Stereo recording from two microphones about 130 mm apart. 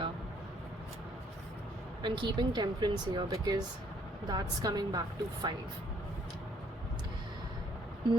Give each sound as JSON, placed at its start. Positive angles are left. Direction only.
{"t": 2.0, "sound": "speech", "side_deg": -40}